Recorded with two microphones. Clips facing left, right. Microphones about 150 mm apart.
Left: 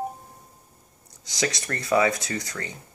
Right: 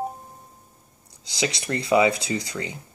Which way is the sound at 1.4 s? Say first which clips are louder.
Right 2 dB; 15° right (ahead or behind).